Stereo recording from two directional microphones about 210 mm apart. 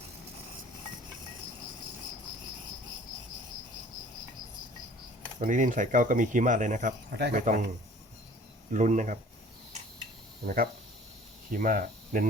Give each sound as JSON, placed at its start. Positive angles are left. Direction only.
{"t": 5.4, "sound": "speech", "side_deg": -40}
{"t": 7.1, "sound": "speech", "side_deg": -50}
{"t": 8.7, "sound": "speech", "side_deg": -35}
{"t": 10.4, "sound": "speech", "side_deg": -45}